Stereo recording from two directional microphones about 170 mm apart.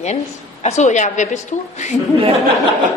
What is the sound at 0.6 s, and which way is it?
Speech, 40° left (ahead or behind).